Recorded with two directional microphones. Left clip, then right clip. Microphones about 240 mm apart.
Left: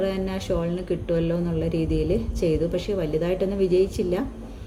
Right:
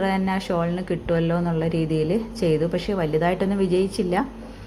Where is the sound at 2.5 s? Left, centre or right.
Centre.